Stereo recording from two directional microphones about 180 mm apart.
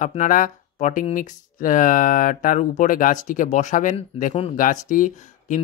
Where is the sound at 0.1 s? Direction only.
45° left (ahead or behind).